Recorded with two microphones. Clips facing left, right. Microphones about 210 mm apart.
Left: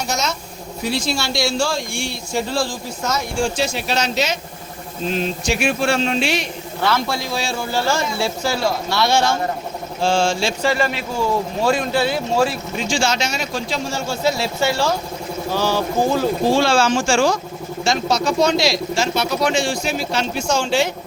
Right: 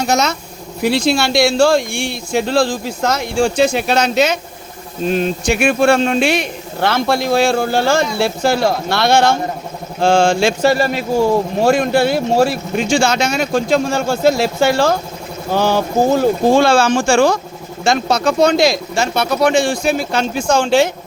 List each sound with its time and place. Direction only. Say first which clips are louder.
0.0 s a man's voice: right 7 dB; 65° right (ahead or behind)
10.8 s a man's voice: right 6 dB; 40° right (ahead or behind)
12.5 s a man's voice: right 7 dB; 60° right (ahead or behind)